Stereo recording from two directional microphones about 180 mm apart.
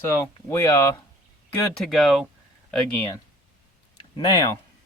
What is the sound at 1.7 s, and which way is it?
Speech, centre (ahead or behind).